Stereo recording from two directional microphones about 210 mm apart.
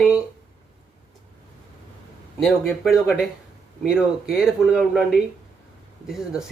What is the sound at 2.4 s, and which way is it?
Speech, centre (ahead or behind).